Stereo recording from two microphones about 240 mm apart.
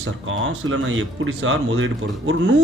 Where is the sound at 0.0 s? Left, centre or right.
Right.